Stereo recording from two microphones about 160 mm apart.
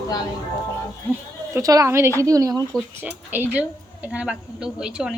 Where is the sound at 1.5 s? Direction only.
20° right (ahead or behind).